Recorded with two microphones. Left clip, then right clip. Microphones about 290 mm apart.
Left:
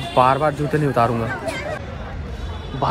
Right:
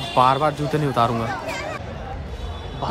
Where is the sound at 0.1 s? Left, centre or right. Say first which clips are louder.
Left 1 dB; centre.